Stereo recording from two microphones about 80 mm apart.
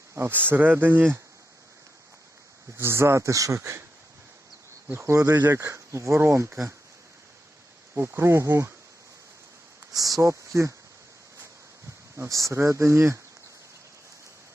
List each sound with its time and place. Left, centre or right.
0.1 s speech: right
2.7 s speech: right
4.9 s speech: right
7.9 s speech: right
9.9 s speech: right
12.1 s speech: right